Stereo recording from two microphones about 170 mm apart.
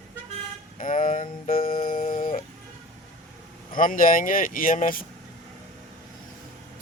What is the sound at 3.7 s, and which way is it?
Speech, 55° left (ahead or behind).